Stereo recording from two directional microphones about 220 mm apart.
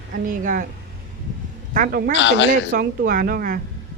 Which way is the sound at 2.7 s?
40° right (ahead or behind).